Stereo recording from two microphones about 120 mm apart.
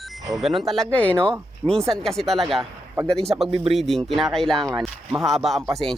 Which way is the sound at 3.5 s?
50° right (ahead or behind).